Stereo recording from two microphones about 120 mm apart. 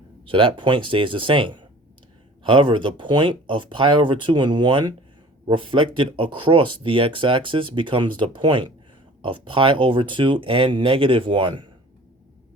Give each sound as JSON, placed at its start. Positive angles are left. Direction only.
{"t": 0.3, "sound": "speech", "side_deg": -45}